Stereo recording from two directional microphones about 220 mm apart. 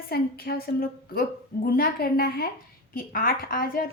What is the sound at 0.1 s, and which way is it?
A woman's voice, 45° left (ahead or behind).